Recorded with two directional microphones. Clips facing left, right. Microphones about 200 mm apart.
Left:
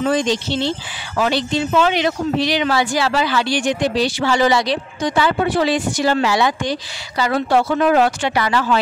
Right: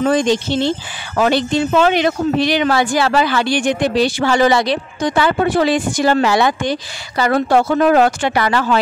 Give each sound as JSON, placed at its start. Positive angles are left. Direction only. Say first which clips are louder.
{"t": 0.0, "sound": "speech", "louder": "right 3 dB", "side_deg": -50}